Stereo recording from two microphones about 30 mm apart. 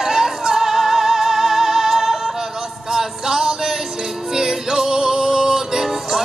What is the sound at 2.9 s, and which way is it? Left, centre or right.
Music, right.